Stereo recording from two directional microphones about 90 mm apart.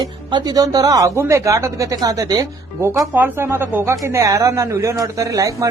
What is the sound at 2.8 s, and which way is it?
Speech, 35° right (ahead or behind).